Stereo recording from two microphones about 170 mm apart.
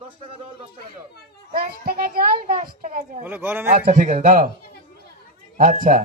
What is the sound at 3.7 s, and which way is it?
Speech, 50° right (ahead or behind).